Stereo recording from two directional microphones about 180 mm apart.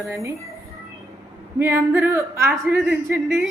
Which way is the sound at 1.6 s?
10° right (ahead or behind).